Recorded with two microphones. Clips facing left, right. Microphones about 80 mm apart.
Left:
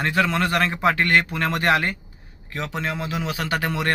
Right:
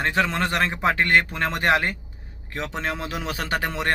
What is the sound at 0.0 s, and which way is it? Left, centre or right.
A man's voice, right.